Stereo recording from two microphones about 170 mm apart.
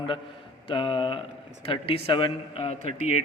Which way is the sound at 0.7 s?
30° left (ahead or behind).